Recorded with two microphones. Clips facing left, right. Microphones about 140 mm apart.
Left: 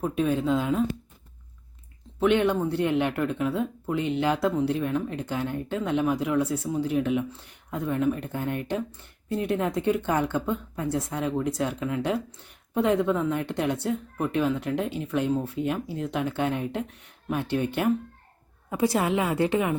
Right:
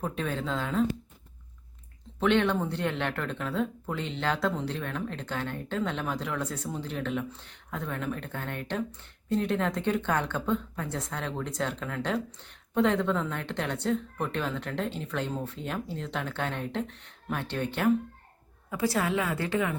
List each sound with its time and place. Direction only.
0.0 s speech: 10° left (ahead or behind)
2.1 s speech: 10° left (ahead or behind)
18.7 s a woman's voice: 20° left (ahead or behind)